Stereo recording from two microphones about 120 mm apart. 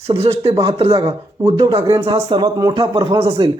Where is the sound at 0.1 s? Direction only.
55° right (ahead or behind).